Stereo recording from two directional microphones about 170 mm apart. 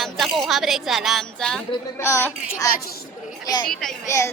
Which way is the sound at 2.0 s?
15° left (ahead or behind).